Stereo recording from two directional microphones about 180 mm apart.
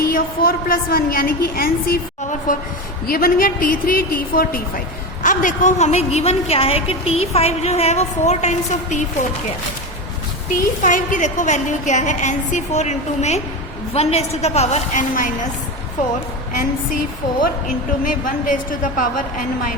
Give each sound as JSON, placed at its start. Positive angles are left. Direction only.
{"t": 0.0, "sound": "a woman's voice", "side_deg": 55}
{"t": 10.8, "sound": "a woman's voice", "side_deg": 45}
{"t": 18.0, "sound": "a woman's voice", "side_deg": 50}